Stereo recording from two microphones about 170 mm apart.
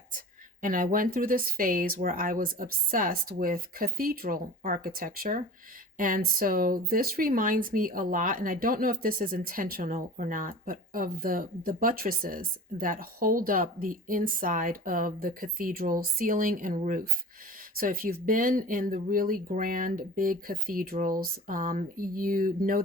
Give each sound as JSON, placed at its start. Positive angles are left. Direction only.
{"t": 0.6, "sound": "speech", "side_deg": -55}